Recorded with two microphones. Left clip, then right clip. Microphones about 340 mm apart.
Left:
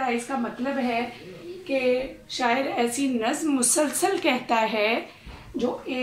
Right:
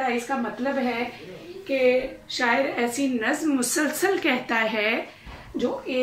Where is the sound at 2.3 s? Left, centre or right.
Centre.